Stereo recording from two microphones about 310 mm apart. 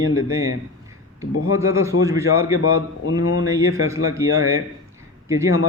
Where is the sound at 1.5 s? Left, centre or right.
Centre.